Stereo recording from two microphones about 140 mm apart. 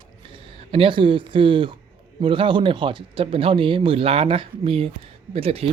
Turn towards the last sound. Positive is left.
turn(degrees=-45)  # may be behind; listen again after turning